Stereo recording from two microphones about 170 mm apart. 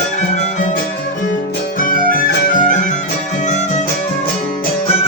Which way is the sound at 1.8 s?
55° left (ahead or behind).